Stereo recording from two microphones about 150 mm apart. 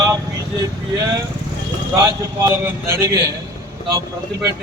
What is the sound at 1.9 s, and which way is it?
A man's voice, 20° right (ahead or behind).